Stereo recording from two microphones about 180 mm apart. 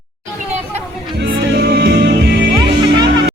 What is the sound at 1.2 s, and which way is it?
Music, 70° right (ahead or behind).